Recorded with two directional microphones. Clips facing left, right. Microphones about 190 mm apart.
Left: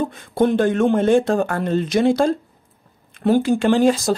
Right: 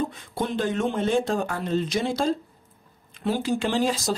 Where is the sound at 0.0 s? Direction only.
55° left (ahead or behind).